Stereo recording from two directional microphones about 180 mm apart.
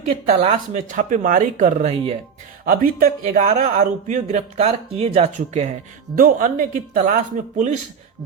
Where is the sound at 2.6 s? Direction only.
50° right (ahead or behind).